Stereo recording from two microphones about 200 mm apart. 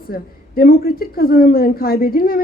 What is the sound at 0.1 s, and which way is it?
Speech, 50° left (ahead or behind).